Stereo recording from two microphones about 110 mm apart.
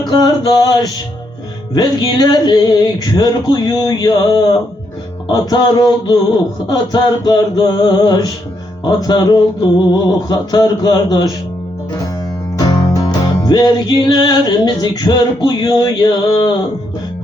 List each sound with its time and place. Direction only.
0.0 s music: 40° left (ahead or behind)
12.5 s music: 35° left (ahead or behind)